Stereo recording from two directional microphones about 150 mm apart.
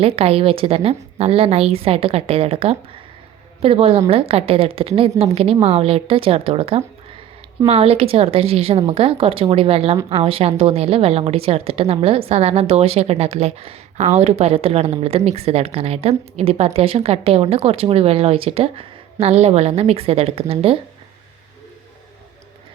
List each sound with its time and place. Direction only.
0.2 s a woman's voice: 40° right (ahead or behind)